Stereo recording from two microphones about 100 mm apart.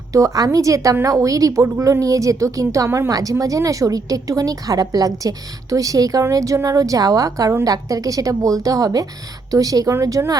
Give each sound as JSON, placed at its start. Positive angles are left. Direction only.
{"t": 0.1, "sound": "a woman's voice", "side_deg": -35}